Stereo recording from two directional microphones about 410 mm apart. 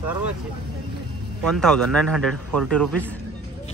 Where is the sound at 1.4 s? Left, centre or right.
Centre.